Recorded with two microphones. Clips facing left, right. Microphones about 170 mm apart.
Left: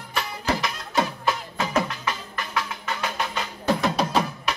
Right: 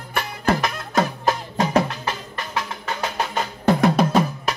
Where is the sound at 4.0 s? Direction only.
50° right (ahead or behind).